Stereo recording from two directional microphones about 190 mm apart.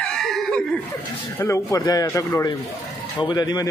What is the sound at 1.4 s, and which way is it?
A man's voice, 15° left (ahead or behind).